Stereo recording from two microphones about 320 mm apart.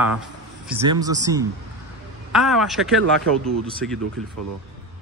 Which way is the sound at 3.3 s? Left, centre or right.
Right.